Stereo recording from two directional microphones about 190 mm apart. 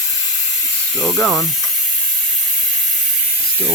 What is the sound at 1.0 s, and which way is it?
Speech, centre (ahead or behind).